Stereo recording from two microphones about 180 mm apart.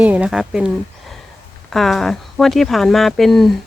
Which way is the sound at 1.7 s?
Centre (ahead or behind).